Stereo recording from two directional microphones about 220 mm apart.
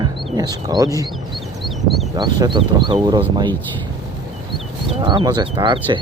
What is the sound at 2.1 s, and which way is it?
Speech, 20° right (ahead or behind).